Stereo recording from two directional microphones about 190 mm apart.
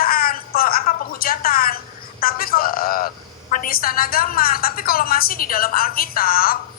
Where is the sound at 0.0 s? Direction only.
50° left (ahead or behind).